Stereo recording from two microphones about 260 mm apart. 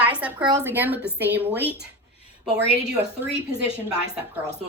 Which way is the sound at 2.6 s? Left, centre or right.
Right.